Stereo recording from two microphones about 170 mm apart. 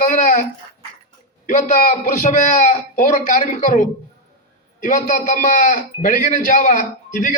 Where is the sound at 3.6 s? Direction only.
50° left (ahead or behind).